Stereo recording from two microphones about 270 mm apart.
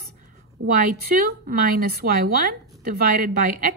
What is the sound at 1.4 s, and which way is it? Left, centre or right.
A woman's voice, right.